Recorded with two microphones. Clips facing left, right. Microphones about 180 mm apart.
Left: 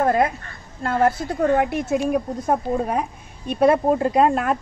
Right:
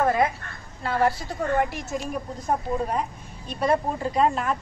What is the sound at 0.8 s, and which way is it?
A woman's voice, 50° left (ahead or behind).